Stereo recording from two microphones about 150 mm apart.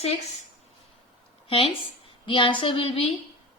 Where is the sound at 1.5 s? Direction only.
35° left (ahead or behind).